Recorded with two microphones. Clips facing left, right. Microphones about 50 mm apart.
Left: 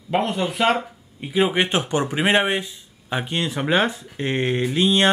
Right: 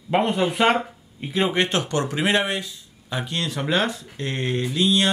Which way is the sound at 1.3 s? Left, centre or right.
Centre.